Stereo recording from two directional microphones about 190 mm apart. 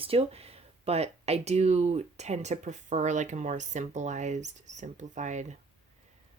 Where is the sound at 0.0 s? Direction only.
30° right (ahead or behind).